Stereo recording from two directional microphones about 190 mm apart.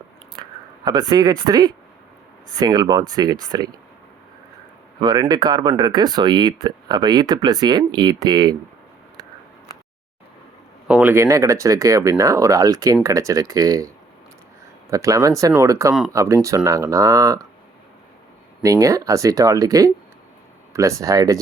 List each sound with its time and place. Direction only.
0.4 s chewing: 25° right (ahead or behind)
0.9 s speech: 20° right (ahead or behind)
4.9 s speech: 20° right (ahead or behind)
10.8 s speech: 10° right (ahead or behind)
18.6 s speech: 15° right (ahead or behind)